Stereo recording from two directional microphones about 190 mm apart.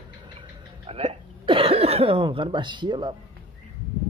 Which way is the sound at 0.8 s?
30° right (ahead or behind).